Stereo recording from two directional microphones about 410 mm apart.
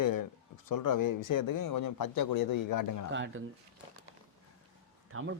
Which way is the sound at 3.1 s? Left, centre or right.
Right.